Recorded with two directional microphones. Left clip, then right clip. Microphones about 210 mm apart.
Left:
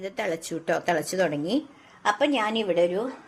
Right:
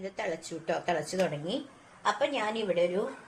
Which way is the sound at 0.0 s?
45° left (ahead or behind).